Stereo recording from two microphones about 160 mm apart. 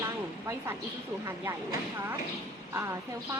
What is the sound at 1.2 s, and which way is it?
Speech, 15° right (ahead or behind).